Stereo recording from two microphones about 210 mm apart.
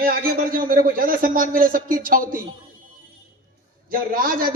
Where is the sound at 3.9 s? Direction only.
40° right (ahead or behind).